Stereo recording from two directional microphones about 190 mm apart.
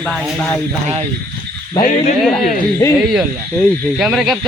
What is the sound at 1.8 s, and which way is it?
Speech, 40° left (ahead or behind).